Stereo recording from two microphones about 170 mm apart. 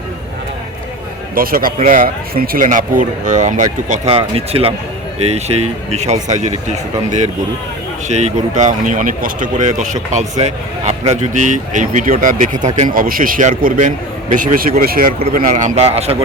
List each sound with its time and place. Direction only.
1.4 s speech: 55° right (ahead or behind)
8.0 s speech: 45° right (ahead or behind)